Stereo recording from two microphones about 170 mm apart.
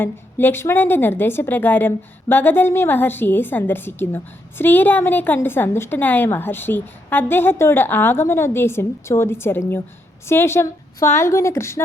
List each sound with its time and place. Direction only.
0.0 s a woman's voice: 10° left (ahead or behind)